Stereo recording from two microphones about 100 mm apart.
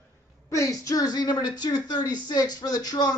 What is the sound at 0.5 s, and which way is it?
A man's voice, 30° left (ahead or behind).